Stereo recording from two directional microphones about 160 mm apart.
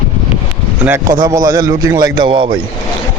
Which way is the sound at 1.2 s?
20° right (ahead or behind).